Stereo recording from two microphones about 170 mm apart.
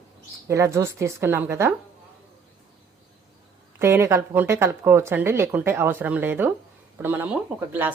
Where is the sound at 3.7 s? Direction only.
15° right (ahead or behind).